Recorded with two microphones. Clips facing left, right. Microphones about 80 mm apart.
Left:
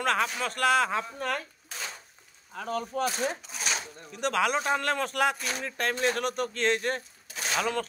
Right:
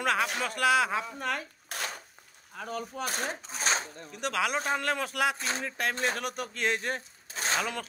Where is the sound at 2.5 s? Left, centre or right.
Centre.